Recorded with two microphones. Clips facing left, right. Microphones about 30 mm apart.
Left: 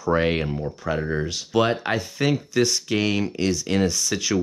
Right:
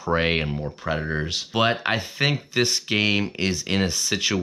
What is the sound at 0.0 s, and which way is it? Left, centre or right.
Speech, right.